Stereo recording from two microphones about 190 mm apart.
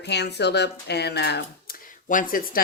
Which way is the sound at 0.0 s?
60° left (ahead or behind).